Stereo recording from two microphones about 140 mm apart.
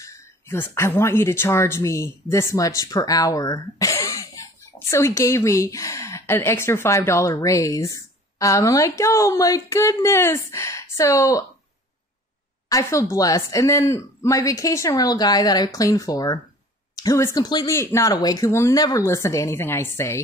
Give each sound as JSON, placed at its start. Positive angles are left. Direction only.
{"t": 0.0, "sound": "a woman's voice", "side_deg": 20}
{"t": 12.6, "sound": "a woman's voice", "side_deg": 25}